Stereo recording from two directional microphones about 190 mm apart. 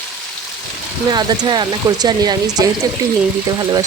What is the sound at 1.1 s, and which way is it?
Speech, 20° right (ahead or behind).